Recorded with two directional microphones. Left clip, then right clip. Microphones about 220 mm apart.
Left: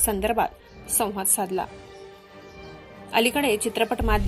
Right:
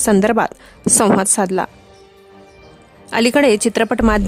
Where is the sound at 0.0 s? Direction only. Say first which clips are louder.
Right 9 dB; 35° right (ahead or behind).